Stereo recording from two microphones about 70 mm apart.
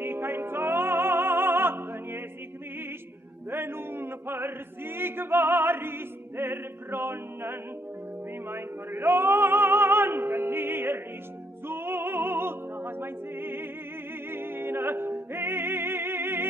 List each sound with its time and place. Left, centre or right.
0.0 s opera: right
3.4 s music: right
8.5 s opera: right
14.3 s music: right